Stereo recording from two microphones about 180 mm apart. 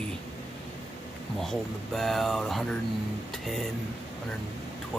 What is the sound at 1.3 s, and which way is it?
Speech, centre (ahead or behind).